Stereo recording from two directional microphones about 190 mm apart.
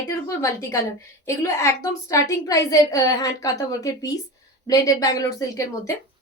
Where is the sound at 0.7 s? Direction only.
15° left (ahead or behind).